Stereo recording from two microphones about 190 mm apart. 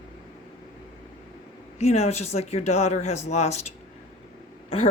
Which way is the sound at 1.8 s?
35° left (ahead or behind).